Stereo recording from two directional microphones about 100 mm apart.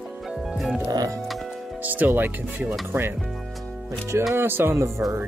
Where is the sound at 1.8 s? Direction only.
20° right (ahead or behind).